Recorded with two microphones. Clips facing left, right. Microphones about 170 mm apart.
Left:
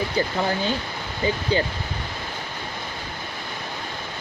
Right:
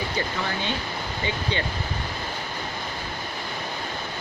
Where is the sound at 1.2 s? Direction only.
35° left (ahead or behind).